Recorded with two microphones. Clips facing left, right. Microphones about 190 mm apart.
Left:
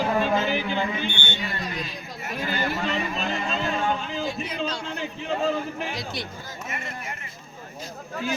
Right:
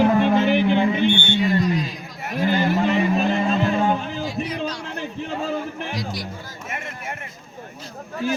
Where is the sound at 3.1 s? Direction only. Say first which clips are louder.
Right 8 dB; 60° right (ahead or behind).